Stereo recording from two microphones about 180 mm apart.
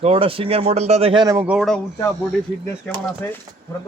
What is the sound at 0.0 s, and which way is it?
Speech, 30° right (ahead or behind).